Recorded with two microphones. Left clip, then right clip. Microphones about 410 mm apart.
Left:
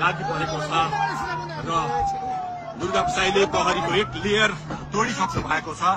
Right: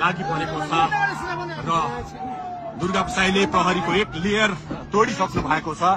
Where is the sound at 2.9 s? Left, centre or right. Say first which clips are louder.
Even; centre.